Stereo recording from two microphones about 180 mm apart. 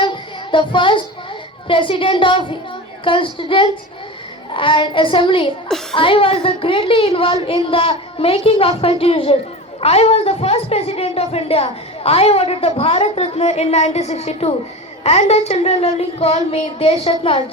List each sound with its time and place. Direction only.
0.0 s child singing: 25° left (ahead or behind)
1.6 s a child's voice: 30° left (ahead or behind)